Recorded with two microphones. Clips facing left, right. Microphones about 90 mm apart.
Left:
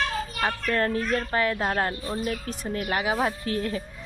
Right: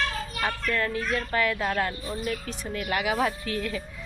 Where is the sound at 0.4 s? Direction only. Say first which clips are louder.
Left 2 dB; 40° left (ahead or behind).